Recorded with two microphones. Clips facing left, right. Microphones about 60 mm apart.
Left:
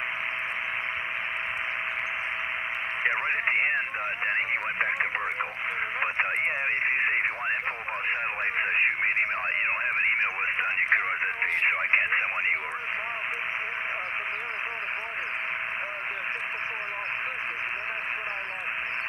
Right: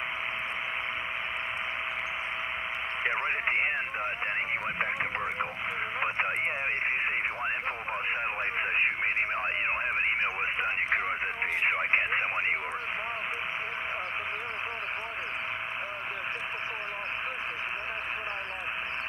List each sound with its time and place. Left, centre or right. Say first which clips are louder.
3.3 s speech: left 3 dB; left
5.9 s radio: left 1 dB; left
6.9 s radio: left 4 dB; left
8.5 s radio: left 4 dB; left